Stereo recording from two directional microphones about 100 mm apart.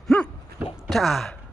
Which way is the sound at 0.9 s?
Centre (ahead or behind).